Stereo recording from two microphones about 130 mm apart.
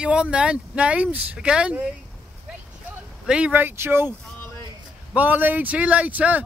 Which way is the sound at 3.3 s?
10° right (ahead or behind).